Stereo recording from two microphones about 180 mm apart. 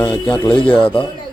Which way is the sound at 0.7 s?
30° left (ahead or behind).